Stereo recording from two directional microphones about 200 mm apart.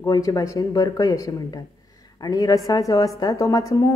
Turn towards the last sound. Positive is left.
turn(degrees=15)  # may be behind; listen again after turning